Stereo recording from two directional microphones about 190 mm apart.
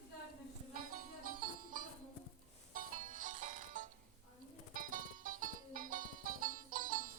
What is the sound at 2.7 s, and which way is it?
Music, 45° right (ahead or behind).